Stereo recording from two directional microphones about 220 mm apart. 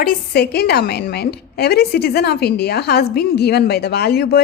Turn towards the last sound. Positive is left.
turn(degrees=45)  # may be behind; listen again after turning